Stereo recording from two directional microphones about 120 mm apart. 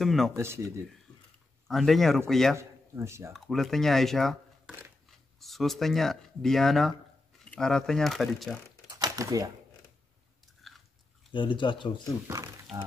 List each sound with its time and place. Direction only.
0.0 s speech: centre (ahead or behind)
0.4 s speech: 20° right (ahead or behind)
1.7 s speech: centre (ahead or behind)
2.5 s speech: 20° right (ahead or behind)
3.3 s speech: centre (ahead or behind)
8.8 s typing: 35° right (ahead or behind)
10.6 s biting: centre (ahead or behind)
11.3 s speech: 45° left (ahead or behind)